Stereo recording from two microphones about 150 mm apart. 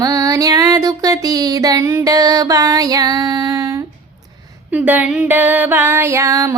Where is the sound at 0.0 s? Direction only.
25° right (ahead or behind).